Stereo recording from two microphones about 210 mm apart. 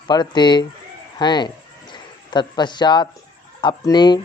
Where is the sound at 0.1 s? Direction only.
20° left (ahead or behind).